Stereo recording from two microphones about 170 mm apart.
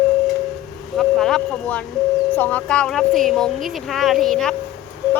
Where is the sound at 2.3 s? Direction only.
10° left (ahead or behind).